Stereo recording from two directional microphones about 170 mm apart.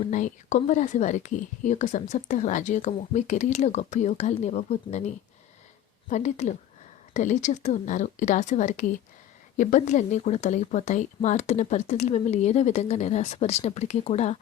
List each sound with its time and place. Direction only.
0.1 s speech: 45° left (ahead or behind)